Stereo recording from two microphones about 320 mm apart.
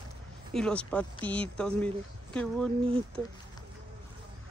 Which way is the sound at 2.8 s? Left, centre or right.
Centre.